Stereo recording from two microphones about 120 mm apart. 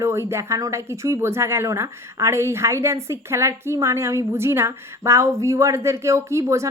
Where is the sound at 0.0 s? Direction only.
20° right (ahead or behind).